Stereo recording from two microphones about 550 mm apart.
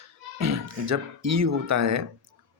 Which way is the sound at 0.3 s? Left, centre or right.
Right.